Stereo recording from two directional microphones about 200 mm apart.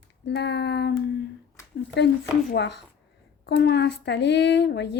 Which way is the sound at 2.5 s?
60° left (ahead or behind).